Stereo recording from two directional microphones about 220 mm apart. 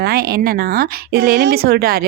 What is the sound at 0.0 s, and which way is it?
Speech, 45° right (ahead or behind).